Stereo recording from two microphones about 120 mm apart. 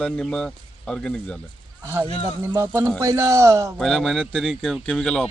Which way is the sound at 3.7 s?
5° left (ahead or behind).